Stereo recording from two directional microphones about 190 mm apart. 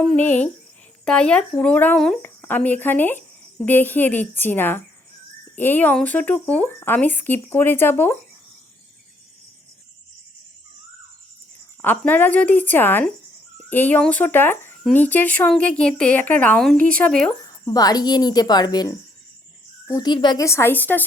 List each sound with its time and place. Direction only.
0.0 s speech: 5° left (ahead or behind)
11.8 s speech: 10° left (ahead or behind)
17.7 s speech: 20° left (ahead or behind)